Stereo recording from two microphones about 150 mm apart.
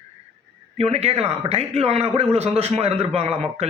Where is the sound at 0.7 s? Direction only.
45° right (ahead or behind).